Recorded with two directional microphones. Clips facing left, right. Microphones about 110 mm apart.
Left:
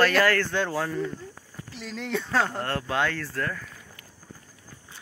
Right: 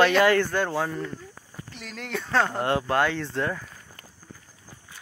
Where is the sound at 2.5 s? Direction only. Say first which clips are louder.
Right 5 dB; 15° right (ahead or behind).